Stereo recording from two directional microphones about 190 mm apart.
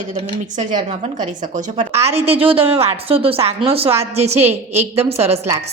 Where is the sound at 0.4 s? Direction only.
40° right (ahead or behind).